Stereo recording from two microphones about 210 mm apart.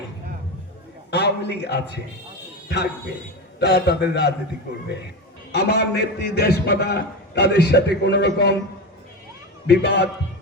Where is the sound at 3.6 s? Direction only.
50° left (ahead or behind).